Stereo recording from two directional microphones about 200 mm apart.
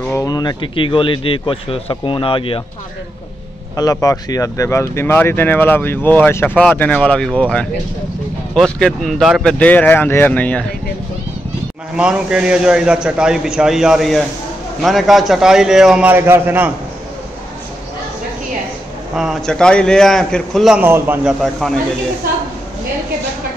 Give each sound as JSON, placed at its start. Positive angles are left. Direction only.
{"t": 0.1, "sound": "speech", "side_deg": 20}
{"t": 3.7, "sound": "speech", "side_deg": 15}
{"t": 8.7, "sound": "speech", "side_deg": 0}
{"t": 12.0, "sound": "a man's voice", "side_deg": -5}
{"t": 19.1, "sound": "a man's voice", "side_deg": 0}